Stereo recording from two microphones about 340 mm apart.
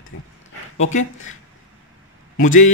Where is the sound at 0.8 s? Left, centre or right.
Left.